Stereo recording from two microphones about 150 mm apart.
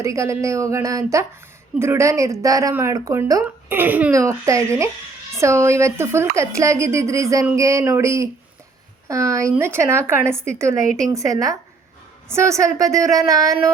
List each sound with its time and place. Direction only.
0.0 s speech: 20° right (ahead or behind)